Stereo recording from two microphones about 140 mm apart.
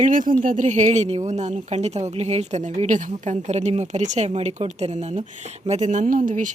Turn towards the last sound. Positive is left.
turn(degrees=-70)  # may be behind; listen again after turning